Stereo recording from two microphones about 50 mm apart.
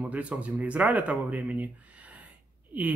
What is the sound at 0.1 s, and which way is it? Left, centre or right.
Speech, right.